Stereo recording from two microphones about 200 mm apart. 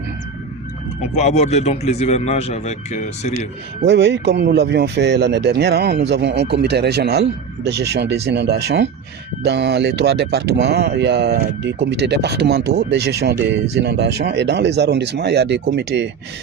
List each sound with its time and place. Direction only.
1.1 s speech: 35° left (ahead or behind)
3.8 s speech: 60° right (ahead or behind)